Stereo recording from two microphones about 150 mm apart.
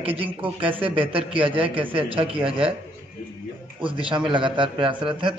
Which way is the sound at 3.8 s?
35° right (ahead or behind).